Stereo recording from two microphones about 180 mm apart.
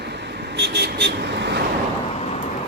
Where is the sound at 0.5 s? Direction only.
70° right (ahead or behind).